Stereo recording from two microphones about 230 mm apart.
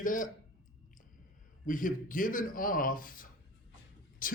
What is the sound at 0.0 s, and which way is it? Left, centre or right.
Speech, left.